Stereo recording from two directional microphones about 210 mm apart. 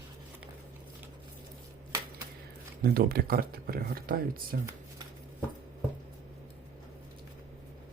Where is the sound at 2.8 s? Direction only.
45° right (ahead or behind).